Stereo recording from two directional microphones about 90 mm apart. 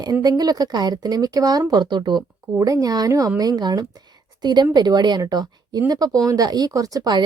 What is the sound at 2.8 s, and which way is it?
A woman's voice, 45° right (ahead or behind).